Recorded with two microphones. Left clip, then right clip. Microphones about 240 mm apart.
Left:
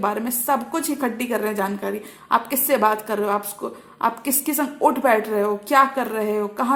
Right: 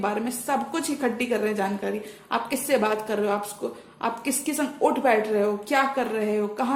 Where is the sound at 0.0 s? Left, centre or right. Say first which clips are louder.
Left 4 dB; left.